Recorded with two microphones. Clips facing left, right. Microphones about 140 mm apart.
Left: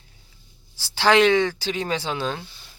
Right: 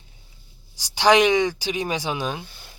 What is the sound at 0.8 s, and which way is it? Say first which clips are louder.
Speech: right 1 dB; 15° right (ahead or behind).